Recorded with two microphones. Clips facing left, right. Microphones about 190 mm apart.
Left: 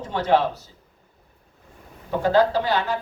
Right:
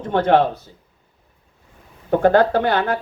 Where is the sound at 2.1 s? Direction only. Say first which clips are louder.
Right 4 dB; 55° right (ahead or behind).